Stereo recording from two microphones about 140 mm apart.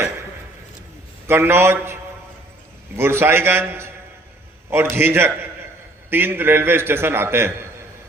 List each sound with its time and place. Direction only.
1.3 s a man's voice: 15° right (ahead or behind)